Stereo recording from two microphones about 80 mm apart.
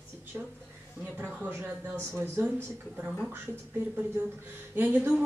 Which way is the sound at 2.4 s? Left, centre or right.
Right.